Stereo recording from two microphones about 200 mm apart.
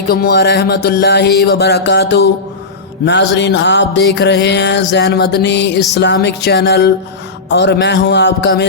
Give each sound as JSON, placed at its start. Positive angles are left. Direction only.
{"t": 0.1, "sound": "music", "side_deg": 50}